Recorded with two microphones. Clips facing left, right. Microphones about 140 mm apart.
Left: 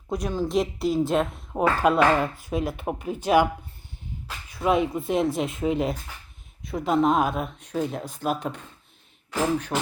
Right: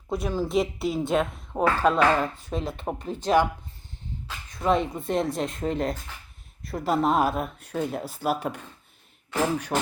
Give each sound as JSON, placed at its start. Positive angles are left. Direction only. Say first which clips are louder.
{"t": 0.1, "sound": "a woman's voice", "louder": "even", "side_deg": 0}
{"t": 9.7, "sound": "speech", "louder": "right 1 dB", "side_deg": -20}